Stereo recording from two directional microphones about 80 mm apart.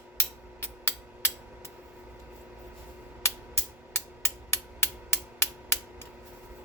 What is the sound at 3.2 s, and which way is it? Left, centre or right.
Music, left.